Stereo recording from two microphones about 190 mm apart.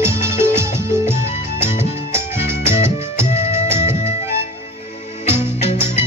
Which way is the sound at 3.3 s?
35° left (ahead or behind).